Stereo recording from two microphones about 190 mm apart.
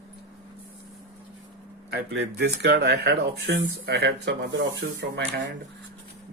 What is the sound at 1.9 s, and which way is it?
Speech, 60° right (ahead or behind).